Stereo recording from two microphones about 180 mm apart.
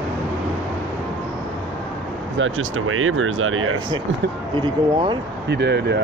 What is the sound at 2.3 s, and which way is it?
Speech, 90° right.